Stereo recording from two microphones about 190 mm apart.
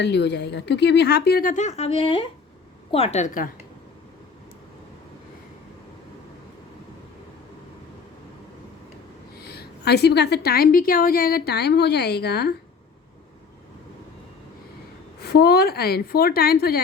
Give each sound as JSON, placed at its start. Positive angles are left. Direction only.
{"t": 0.0, "sound": "a woman's voice", "side_deg": 65}
{"t": 9.4, "sound": "a woman's voice", "side_deg": 55}
{"t": 15.2, "sound": "a woman's voice", "side_deg": 55}